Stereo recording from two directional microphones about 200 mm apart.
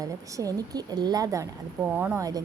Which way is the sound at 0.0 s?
15° right (ahead or behind).